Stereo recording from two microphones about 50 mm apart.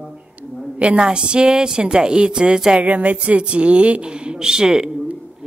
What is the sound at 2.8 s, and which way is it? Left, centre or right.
A woman's voice, right.